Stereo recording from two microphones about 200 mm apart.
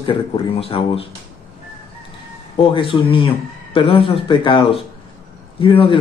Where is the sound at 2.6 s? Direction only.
25° left (ahead or behind).